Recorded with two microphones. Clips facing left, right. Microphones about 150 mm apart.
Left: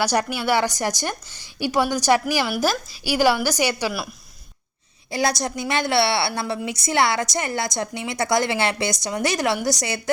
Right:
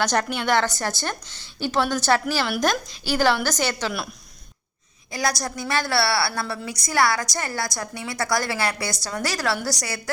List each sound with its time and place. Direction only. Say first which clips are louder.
0.0 s a woman's voice: left 1 dB; 10° left (ahead or behind)
5.1 s a woman's voice: left 3 dB; 25° left (ahead or behind)